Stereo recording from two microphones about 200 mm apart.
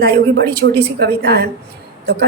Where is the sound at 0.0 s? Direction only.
50° right (ahead or behind).